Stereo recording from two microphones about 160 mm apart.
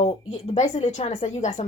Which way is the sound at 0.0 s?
40° left (ahead or behind).